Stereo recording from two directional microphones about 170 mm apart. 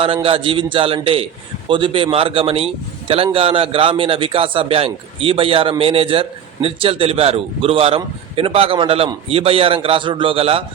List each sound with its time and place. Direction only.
0.0 s a man's voice: 30° right (ahead or behind)